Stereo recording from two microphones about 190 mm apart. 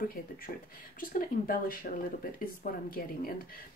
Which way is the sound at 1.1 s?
50° left (ahead or behind).